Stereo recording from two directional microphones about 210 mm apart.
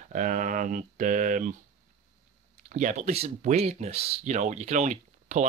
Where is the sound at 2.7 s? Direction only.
35° right (ahead or behind).